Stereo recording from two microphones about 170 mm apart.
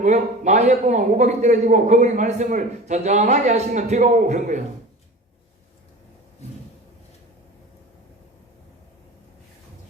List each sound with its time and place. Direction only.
0.0 s a man's voice: 45° right (ahead or behind)